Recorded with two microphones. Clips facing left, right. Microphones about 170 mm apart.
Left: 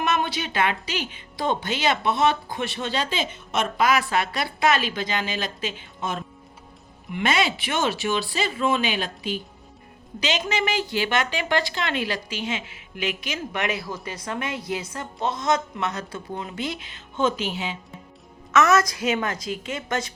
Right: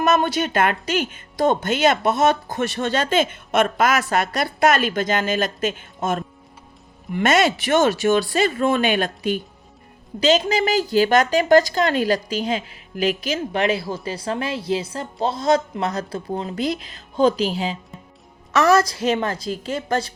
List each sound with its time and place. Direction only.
0.0 s speech: 45° right (ahead or behind)
10.2 s a woman's voice: 35° right (ahead or behind)